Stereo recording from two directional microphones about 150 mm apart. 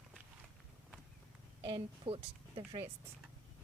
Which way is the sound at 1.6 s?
35° right (ahead or behind).